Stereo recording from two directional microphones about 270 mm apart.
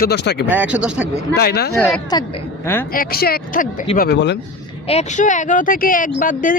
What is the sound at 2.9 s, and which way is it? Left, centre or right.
Speech, left.